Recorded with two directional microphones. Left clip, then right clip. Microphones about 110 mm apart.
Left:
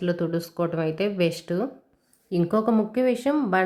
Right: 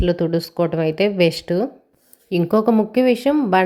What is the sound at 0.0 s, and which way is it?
A woman's voice, 30° right (ahead or behind).